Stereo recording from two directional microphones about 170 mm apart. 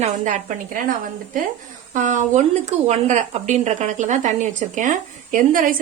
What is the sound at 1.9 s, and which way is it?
Speech, 45° right (ahead or behind).